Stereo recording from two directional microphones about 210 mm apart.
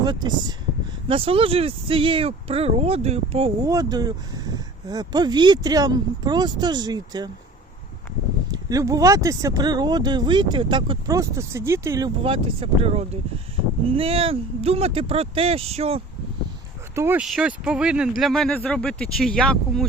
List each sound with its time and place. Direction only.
0.0 s speech: 20° right (ahead or behind)
3.7 s speech: 15° right (ahead or behind)
8.5 s speech: 15° right (ahead or behind)
16.9 s speech: 10° right (ahead or behind)